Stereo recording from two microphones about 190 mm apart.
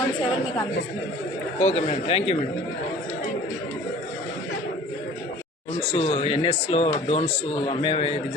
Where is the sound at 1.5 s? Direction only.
35° left (ahead or behind).